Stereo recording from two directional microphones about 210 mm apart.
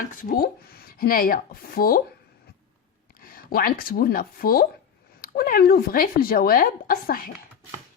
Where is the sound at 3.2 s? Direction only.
45° left (ahead or behind).